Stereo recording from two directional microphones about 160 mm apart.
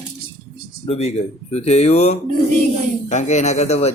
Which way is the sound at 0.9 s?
40° left (ahead or behind).